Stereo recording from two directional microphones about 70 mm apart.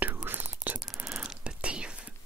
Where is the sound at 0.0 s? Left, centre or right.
Right.